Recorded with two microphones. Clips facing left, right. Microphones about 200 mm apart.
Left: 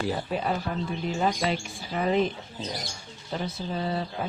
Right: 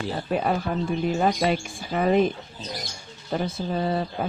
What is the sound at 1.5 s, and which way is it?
Speech, 50° right (ahead or behind).